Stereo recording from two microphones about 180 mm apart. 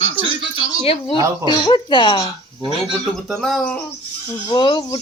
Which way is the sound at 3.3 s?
Centre (ahead or behind).